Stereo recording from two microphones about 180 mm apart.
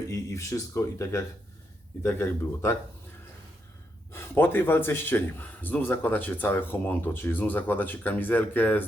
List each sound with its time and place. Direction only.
0.1 s a man's voice: 15° left (ahead or behind)
4.1 s a man's voice: 10° left (ahead or behind)